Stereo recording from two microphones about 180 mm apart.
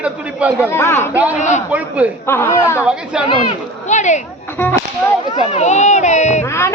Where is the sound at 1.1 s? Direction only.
10° right (ahead or behind).